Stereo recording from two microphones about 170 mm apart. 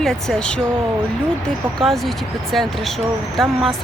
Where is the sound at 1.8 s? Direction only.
Centre (ahead or behind).